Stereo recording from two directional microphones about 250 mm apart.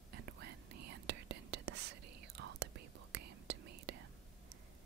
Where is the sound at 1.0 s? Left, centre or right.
Right.